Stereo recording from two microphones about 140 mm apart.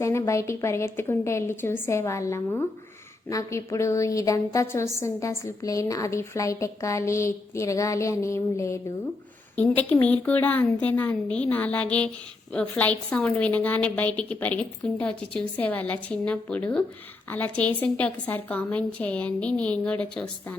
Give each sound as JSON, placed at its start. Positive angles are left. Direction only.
{"t": 0.0, "sound": "a woman's voice", "side_deg": 20}